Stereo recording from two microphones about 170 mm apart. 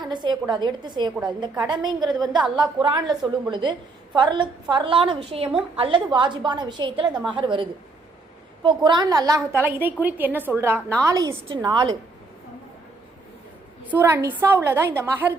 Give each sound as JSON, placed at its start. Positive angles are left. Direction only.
{"t": 0.1, "sound": "a woman's voice", "side_deg": -25}
{"t": 13.9, "sound": "a woman's voice", "side_deg": -15}